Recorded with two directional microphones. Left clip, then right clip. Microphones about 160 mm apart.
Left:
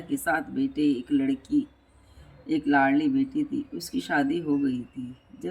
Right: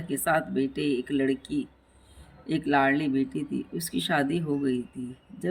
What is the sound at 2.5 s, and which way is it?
Speech, 35° right (ahead or behind).